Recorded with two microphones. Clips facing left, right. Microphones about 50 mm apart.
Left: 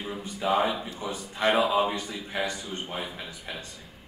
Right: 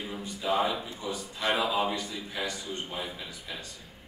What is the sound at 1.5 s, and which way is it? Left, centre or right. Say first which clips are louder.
A man's voice: left 3 dB; left.